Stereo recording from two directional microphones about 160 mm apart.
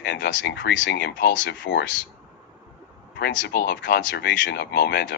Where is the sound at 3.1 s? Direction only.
85° left.